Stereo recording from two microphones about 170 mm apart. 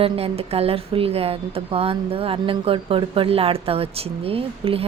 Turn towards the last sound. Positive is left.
turn(degrees=-35)  # may be behind; listen again after turning